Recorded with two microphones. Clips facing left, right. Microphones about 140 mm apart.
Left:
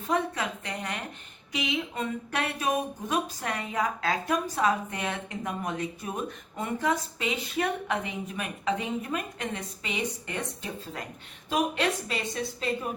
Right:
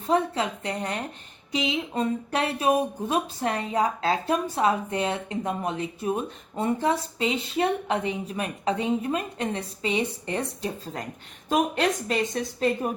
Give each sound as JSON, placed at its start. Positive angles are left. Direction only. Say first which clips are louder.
{"t": 0.1, "sound": "a woman's voice", "louder": "right 5 dB", "side_deg": -30}